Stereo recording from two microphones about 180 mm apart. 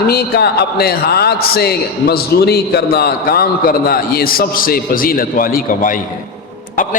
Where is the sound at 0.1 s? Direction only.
60° left (ahead or behind).